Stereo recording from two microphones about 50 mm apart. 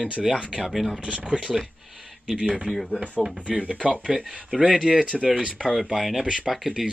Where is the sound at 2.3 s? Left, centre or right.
Centre.